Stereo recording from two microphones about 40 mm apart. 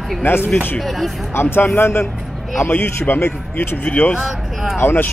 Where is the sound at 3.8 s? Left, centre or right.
Left.